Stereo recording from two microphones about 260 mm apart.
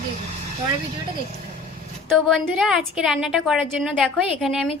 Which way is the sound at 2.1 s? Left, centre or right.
Centre.